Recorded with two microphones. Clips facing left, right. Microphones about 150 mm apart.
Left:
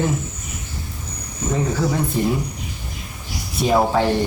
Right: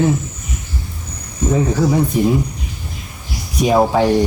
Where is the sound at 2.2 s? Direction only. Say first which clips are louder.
Right 4 dB; 15° right (ahead or behind).